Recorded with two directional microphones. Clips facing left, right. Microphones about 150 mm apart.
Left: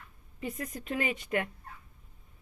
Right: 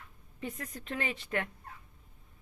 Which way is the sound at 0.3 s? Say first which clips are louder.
Left 3 dB; 10° left (ahead or behind).